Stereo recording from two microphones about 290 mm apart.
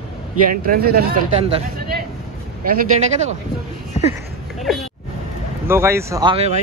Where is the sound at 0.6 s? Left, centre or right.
Right.